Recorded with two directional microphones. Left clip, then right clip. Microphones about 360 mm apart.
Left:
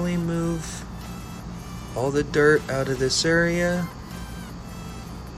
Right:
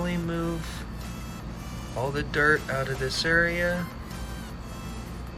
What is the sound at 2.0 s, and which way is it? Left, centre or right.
Speech, centre.